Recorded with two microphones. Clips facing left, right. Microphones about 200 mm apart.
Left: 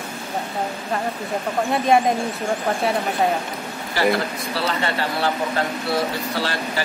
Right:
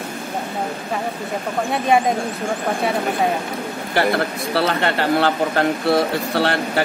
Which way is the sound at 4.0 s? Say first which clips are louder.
Right 1 dB; 55° right (ahead or behind).